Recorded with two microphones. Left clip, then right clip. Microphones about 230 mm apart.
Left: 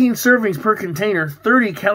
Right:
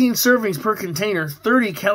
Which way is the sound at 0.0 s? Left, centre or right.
Centre.